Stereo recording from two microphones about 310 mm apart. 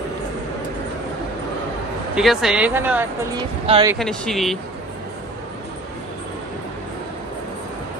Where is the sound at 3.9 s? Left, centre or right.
Centre.